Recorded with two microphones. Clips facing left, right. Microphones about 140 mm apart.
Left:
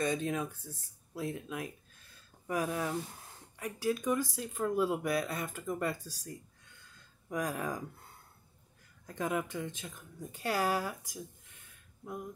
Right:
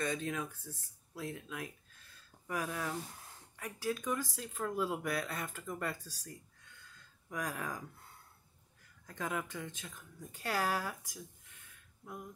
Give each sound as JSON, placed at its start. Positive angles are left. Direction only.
{"t": 0.0, "sound": "speech", "side_deg": 20}
{"t": 9.0, "sound": "speech", "side_deg": 20}